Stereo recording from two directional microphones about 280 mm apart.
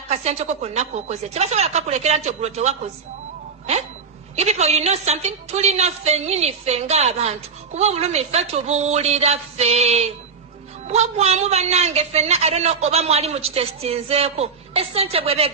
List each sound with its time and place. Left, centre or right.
0.1 s a woman's voice: right
4.4 s a woman's voice: right